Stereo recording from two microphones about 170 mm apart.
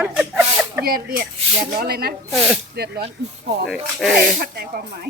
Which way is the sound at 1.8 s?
65° right (ahead or behind).